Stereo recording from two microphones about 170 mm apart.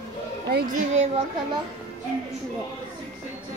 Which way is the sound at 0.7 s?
40° right (ahead or behind).